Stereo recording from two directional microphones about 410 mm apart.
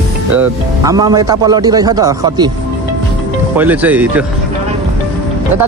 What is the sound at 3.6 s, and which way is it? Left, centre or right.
Speech, centre.